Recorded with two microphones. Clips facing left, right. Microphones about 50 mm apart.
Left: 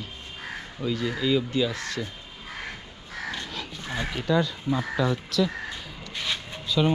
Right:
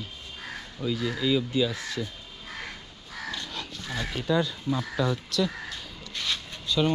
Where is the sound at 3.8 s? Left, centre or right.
Centre.